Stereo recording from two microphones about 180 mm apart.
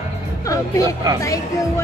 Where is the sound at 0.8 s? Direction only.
20° right (ahead or behind).